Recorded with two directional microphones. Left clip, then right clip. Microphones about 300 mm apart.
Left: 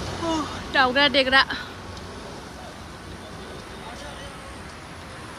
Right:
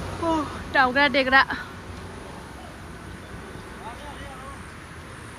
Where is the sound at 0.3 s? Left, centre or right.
Centre.